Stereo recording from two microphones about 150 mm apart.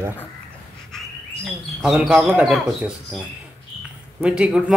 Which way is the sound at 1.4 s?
Centre (ahead or behind).